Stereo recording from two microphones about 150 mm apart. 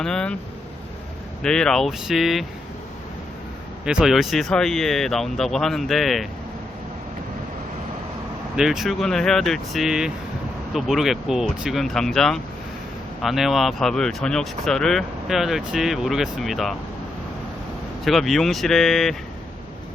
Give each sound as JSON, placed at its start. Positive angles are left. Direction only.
{"t": 0.0, "sound": "speech", "side_deg": 5}
{"t": 1.4, "sound": "speech", "side_deg": 5}
{"t": 3.8, "sound": "speech", "side_deg": -5}
{"t": 8.5, "sound": "speech", "side_deg": -5}
{"t": 18.0, "sound": "speech", "side_deg": 0}